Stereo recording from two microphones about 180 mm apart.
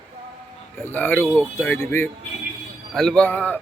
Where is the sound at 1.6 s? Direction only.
15° left (ahead or behind).